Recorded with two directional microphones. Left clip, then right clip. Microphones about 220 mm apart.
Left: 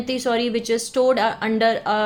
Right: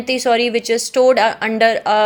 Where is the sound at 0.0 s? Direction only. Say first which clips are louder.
Right 6 dB; 20° right (ahead or behind).